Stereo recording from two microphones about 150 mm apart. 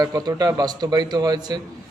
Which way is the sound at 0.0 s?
25° right (ahead or behind).